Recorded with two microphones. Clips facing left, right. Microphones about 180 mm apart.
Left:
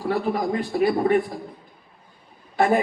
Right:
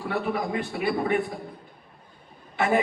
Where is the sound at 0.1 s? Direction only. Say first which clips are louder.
Left 4 dB; 40° left (ahead or behind).